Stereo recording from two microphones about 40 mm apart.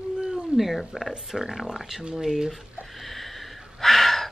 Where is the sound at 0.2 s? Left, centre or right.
Right.